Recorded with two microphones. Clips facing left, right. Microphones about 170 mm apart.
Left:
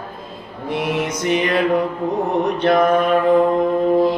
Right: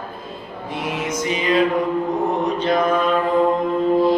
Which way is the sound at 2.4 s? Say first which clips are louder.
Left 6 dB; 65° left (ahead or behind).